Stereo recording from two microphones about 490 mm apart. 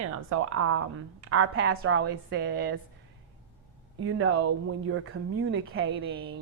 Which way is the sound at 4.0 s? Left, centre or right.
Right.